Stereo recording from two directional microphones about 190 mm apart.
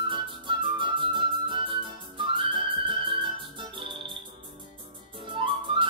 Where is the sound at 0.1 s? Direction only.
25° right (ahead or behind).